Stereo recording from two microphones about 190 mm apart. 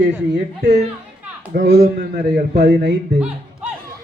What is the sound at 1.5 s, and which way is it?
A man's voice, 50° right (ahead or behind).